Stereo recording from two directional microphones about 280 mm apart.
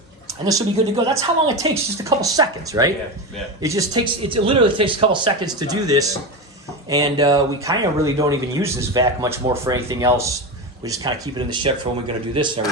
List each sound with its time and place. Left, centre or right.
0.3 s a man's voice: centre